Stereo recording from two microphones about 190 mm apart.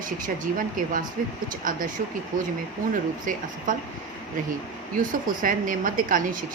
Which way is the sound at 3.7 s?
45° right (ahead or behind).